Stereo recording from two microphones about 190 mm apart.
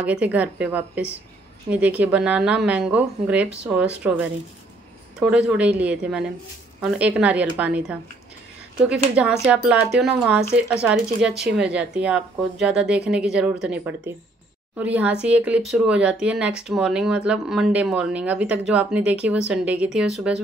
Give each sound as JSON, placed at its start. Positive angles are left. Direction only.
{"t": 0.0, "sound": "a woman's voice", "side_deg": -5}
{"t": 9.1, "sound": "a woman's voice", "side_deg": -5}